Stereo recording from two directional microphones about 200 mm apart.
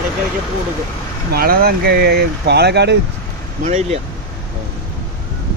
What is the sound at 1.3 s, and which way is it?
Speech, 50° right (ahead or behind).